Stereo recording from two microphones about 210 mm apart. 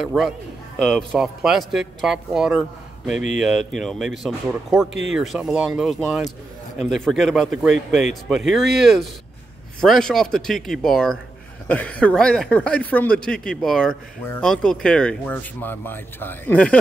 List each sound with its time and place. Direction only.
0.0 s speech: centre (ahead or behind)